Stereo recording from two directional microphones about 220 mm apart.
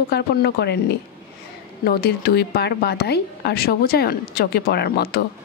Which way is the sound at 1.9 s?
45° left (ahead or behind).